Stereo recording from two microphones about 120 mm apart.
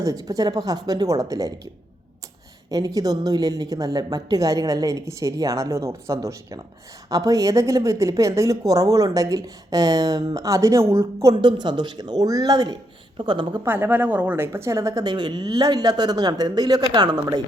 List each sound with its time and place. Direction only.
0.0 s a woman's voice: 30° right (ahead or behind)
2.6 s a woman's voice: 30° right (ahead or behind)
11.3 s a woman's voice: 40° right (ahead or behind)
13.7 s a woman's voice: 15° right (ahead or behind); by 17.4 s 35° right (ahead or behind)